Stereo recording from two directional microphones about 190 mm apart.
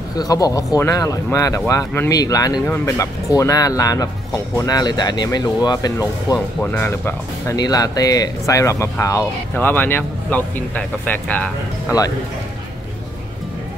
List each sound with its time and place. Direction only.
0.1 s speech: 20° left (ahead or behind)